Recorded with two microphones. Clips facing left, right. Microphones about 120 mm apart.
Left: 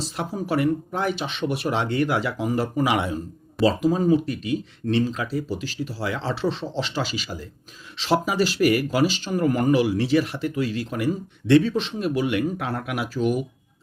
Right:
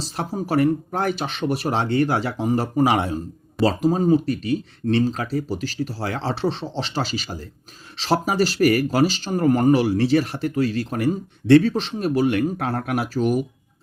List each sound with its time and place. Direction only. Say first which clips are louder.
0.0 s speech: right 1 dB; 35° right (ahead or behind)